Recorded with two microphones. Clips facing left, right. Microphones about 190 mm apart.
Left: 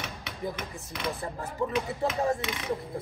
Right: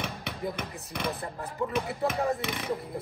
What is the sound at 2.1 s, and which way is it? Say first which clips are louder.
Speech: left 1 dB; 55° right (ahead or behind).